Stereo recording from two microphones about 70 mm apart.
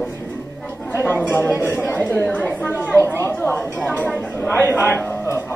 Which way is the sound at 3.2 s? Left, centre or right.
Left.